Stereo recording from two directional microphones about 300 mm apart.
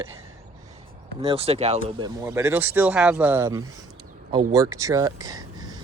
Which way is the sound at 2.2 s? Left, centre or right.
Centre.